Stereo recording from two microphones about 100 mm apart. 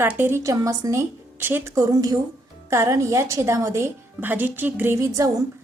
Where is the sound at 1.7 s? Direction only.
35° right (ahead or behind).